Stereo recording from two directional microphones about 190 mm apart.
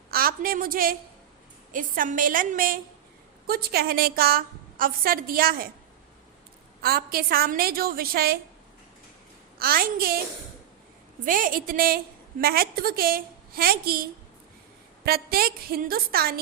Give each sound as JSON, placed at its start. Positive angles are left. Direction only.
{"t": 0.1, "sound": "a woman's voice", "side_deg": -50}
{"t": 6.8, "sound": "a woman's voice", "side_deg": -55}
{"t": 9.6, "sound": "a woman's voice", "side_deg": -50}
{"t": 11.3, "sound": "a woman's voice", "side_deg": -45}